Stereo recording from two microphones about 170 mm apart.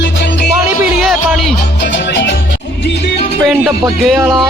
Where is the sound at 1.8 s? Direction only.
90° left.